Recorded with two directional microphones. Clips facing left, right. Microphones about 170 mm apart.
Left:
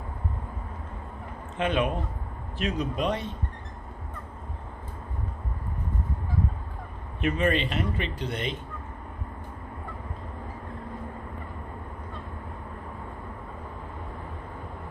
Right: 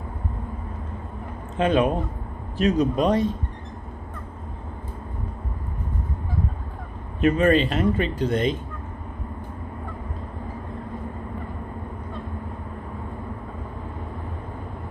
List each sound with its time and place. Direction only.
1.6 s speech: 35° right (ahead or behind)
7.2 s speech: 40° right (ahead or behind)